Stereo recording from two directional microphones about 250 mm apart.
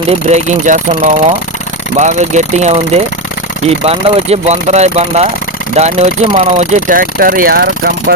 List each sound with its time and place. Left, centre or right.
0.1 s speech: right